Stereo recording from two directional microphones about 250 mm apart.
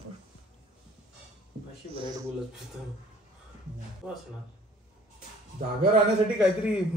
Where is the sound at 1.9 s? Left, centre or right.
Centre.